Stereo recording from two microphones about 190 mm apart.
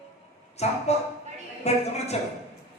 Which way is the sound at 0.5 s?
35° left (ahead or behind).